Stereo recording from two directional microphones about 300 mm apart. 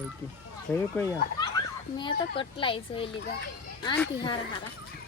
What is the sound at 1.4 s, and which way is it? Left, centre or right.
A child's voice, centre.